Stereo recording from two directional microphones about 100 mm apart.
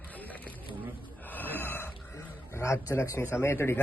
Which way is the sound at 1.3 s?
20° left (ahead or behind).